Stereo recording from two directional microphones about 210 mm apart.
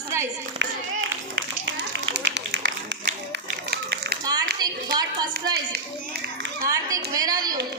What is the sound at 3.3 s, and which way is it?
Run, 55° right (ahead or behind).